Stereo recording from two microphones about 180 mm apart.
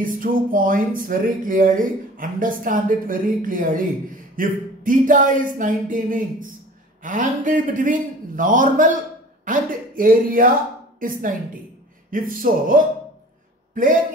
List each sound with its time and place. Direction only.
0.0 s speech: 50° right (ahead or behind)